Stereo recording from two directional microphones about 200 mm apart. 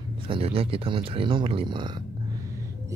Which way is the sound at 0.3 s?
30° right (ahead or behind).